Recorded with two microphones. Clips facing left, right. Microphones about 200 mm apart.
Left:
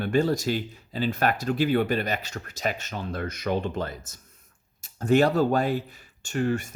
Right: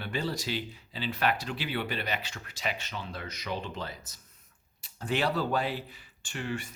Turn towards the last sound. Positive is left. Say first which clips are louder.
# left 10 dB
turn(degrees=45)  # may be behind; listen again after turning